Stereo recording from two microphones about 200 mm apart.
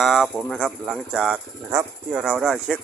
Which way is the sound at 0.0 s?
Centre (ahead or behind).